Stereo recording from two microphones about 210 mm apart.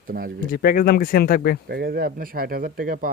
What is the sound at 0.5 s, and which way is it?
Speech, 45° left (ahead or behind).